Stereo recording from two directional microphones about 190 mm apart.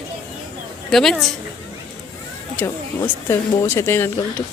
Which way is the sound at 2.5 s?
10° left (ahead or behind).